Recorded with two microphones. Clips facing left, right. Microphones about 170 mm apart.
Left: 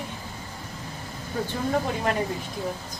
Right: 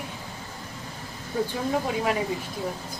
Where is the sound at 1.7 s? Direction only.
5° right (ahead or behind).